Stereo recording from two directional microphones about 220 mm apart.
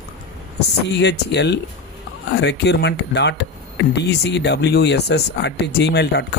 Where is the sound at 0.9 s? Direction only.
50° left (ahead or behind).